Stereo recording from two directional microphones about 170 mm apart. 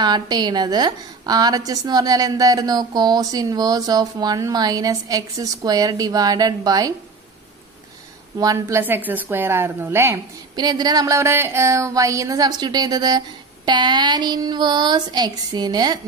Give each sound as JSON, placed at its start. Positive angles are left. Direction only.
{"t": 0.0, "sound": "a woman's voice", "side_deg": -25}
{"t": 8.4, "sound": "a woman's voice", "side_deg": -20}